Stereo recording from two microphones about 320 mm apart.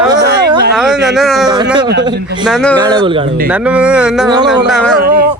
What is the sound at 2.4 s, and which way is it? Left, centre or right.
Speech, centre.